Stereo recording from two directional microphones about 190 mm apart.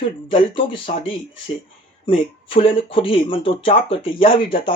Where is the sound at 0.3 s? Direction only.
25° left (ahead or behind).